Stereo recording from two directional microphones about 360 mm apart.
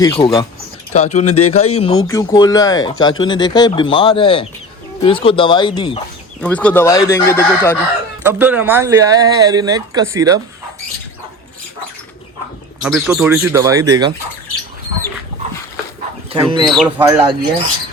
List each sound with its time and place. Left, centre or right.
0.0 s speech: centre
1.3 s speech: left
2.0 s speech: centre
8.2 s speech: centre
12.8 s speech: centre
16.3 s speech: centre
16.7 s speech: centre
17.1 s speech: centre